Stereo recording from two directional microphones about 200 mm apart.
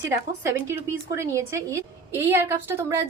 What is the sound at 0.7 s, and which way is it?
A woman's voice, 15° right (ahead or behind).